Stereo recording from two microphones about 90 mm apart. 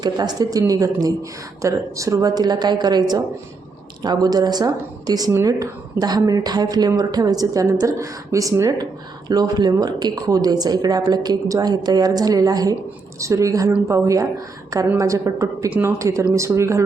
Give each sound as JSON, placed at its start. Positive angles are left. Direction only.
{"t": 0.0, "sound": "a woman's voice", "side_deg": -50}
{"t": 9.3, "sound": "a woman's voice", "side_deg": -50}